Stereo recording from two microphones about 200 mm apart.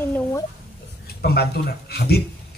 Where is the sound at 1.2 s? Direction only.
50° left (ahead or behind).